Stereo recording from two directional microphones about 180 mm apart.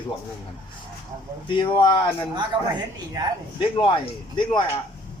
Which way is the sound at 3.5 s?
25° left (ahead or behind).